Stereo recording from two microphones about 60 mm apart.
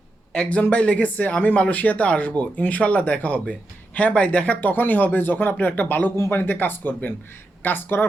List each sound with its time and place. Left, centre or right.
0.3 s speech: left